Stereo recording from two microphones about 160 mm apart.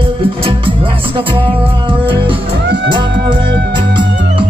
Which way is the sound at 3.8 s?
30° right (ahead or behind).